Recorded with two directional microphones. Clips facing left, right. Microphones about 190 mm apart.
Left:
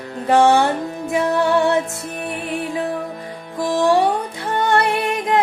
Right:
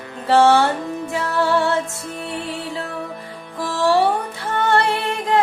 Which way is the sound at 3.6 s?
15° left (ahead or behind).